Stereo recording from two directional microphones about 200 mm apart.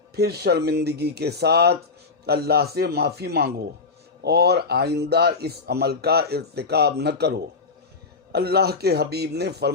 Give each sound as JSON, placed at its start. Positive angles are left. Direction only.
{"t": 0.2, "sound": "speech", "side_deg": -50}